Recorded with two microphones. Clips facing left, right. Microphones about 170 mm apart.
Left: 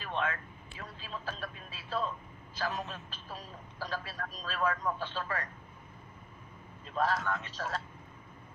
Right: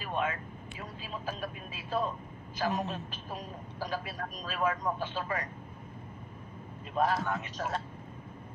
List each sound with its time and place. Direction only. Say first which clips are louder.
0.0 s speech: right 2 dB; 10° right (ahead or behind)
7.2 s speech: right 2 dB; 15° right (ahead or behind)